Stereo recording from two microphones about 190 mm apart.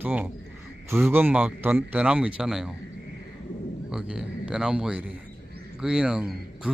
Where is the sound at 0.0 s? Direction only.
10° right (ahead or behind).